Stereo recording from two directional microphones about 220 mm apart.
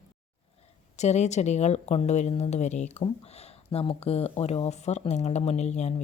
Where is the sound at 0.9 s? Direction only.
30° left (ahead or behind).